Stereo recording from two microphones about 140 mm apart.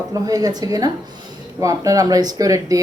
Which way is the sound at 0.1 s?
25° right (ahead or behind).